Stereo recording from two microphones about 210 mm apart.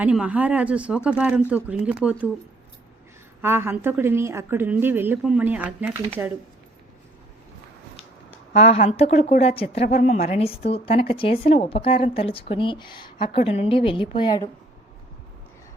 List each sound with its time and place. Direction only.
0.0 s speech: 5° right (ahead or behind)
3.4 s a woman's voice: 10° right (ahead or behind)
8.5 s a woman's voice: 30° left (ahead or behind)